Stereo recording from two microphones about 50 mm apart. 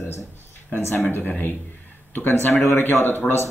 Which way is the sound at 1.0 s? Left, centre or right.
Left.